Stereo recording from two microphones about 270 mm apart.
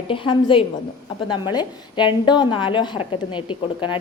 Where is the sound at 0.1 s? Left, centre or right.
Centre.